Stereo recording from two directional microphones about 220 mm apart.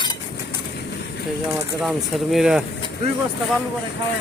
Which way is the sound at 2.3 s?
5° right (ahead or behind).